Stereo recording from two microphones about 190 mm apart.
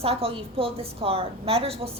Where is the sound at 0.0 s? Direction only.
30° right (ahead or behind).